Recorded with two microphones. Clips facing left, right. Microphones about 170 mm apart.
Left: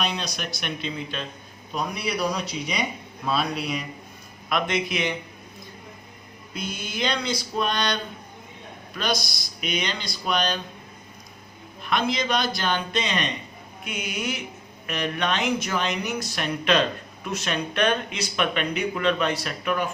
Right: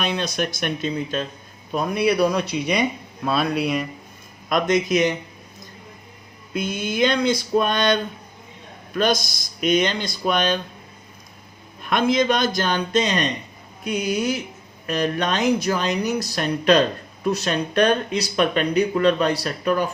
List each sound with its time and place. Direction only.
0.0 s speech: 55° right (ahead or behind)
4.4 s speech: 40° right (ahead or behind)
6.5 s speech: 50° right (ahead or behind)
11.8 s speech: 50° right (ahead or behind)